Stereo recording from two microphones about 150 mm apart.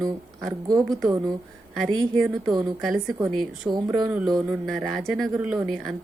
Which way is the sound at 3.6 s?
25° right (ahead or behind).